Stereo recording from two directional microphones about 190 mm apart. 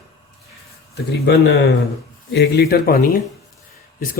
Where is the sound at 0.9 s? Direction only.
60° left (ahead or behind).